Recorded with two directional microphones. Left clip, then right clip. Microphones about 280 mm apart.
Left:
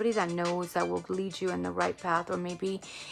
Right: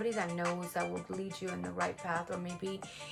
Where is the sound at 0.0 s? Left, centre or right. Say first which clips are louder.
Left 6 dB; centre.